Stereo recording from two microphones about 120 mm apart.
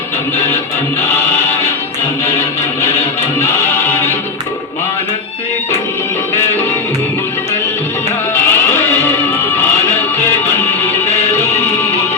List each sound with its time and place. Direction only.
3.3 s music: 25° left (ahead or behind)
8.4 s music: 20° left (ahead or behind)